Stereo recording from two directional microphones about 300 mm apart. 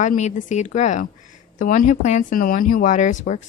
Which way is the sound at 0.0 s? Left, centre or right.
Left.